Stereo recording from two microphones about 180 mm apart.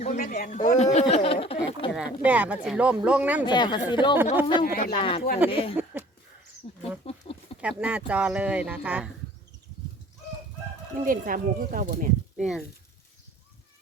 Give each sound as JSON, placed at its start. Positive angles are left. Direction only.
{"t": 0.0, "sound": "speech", "side_deg": 40}
{"t": 1.9, "sound": "speech", "side_deg": -5}
{"t": 3.4, "sound": "speech", "side_deg": 25}
{"t": 4.6, "sound": "speech", "side_deg": 55}
{"t": 4.9, "sound": "speech", "side_deg": 30}
{"t": 5.7, "sound": "a sound", "side_deg": -10}
{"t": 6.6, "sound": "a sound", "side_deg": 30}
{"t": 7.6, "sound": "speech", "side_deg": -5}
{"t": 10.9, "sound": "speech", "side_deg": -50}
{"t": 12.4, "sound": "speech", "side_deg": 0}